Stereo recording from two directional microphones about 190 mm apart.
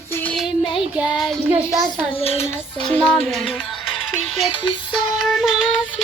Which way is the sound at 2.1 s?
30° left (ahead or behind).